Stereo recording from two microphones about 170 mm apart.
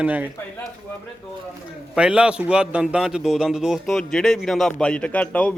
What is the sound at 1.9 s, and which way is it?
A man's voice, 5° right (ahead or behind).